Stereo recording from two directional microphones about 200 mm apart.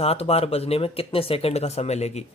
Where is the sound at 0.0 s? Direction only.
30° left (ahead or behind).